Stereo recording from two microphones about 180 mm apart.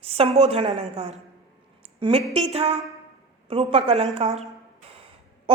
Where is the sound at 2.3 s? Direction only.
35° right (ahead or behind).